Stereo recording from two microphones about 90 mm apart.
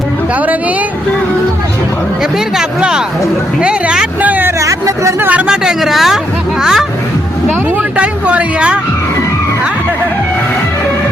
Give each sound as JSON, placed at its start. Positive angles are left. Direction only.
{"t": 2.6, "sound": "speech", "side_deg": -10}
{"t": 4.6, "sound": "speech", "side_deg": -35}
{"t": 5.2, "sound": "speech", "side_deg": -15}
{"t": 5.6, "sound": "speech", "side_deg": 0}
{"t": 7.9, "sound": "speech", "side_deg": -15}